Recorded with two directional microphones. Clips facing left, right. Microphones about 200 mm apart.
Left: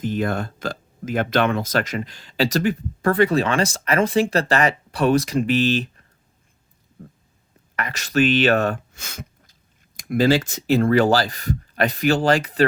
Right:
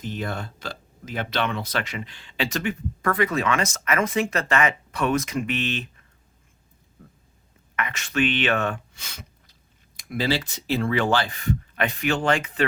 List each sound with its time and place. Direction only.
0.0 s speech: 50° left (ahead or behind)
7.8 s speech: 35° left (ahead or behind)